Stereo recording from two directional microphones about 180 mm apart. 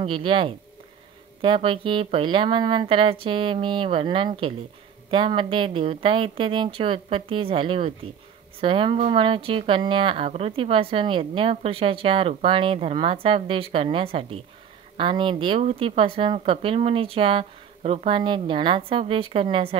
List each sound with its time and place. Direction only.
0.0 s speech: 30° right (ahead or behind)